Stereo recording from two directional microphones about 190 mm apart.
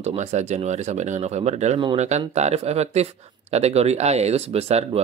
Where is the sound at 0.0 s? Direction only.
35° right (ahead or behind).